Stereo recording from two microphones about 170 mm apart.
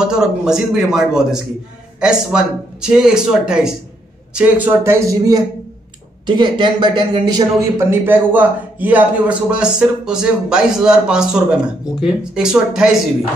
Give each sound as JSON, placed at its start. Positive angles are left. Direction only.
{"t": 0.0, "sound": "a man's voice", "side_deg": -5}
{"t": 7.9, "sound": "a man's voice", "side_deg": -10}